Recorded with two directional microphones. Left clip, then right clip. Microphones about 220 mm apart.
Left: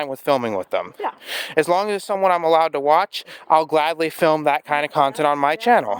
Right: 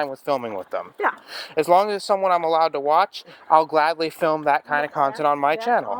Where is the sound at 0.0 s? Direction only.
45° left (ahead or behind).